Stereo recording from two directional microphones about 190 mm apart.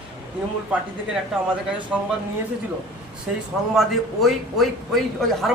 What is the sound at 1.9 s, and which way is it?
Speech, centre (ahead or behind).